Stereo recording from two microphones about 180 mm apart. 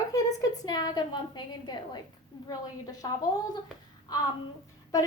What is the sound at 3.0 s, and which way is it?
Speech, 25° left (ahead or behind).